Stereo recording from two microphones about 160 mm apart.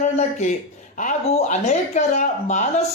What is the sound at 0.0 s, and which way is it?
Speech, 45° left (ahead or behind).